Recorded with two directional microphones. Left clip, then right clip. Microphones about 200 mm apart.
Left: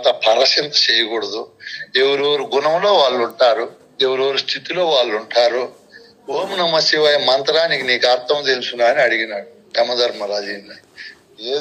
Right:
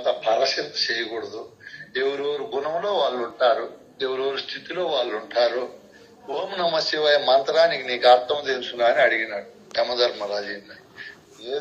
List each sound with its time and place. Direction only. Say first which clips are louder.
0.0 s a man's voice: left 7 dB; 50° left (ahead or behind)